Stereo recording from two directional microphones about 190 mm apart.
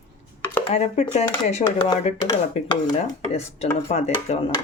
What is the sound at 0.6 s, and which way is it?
Speech, 35° left (ahead or behind).